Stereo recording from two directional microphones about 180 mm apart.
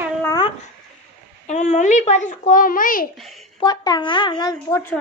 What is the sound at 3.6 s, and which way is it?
Speech, 20° left (ahead or behind).